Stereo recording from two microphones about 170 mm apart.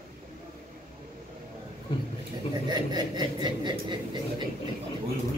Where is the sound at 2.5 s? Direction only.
25° right (ahead or behind).